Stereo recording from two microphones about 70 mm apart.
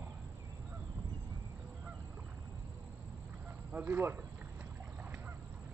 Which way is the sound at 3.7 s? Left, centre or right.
Right.